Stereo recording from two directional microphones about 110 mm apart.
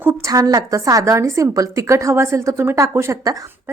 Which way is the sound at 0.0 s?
25° right (ahead or behind).